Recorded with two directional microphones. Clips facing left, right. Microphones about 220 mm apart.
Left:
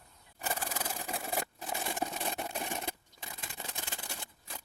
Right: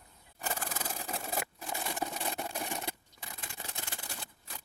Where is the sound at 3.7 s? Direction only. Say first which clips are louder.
Left 1 dB; 20° left (ahead or behind).